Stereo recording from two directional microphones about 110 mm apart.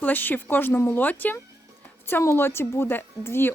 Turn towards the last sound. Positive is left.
turn(degrees=20)  # may be behind; listen again after turning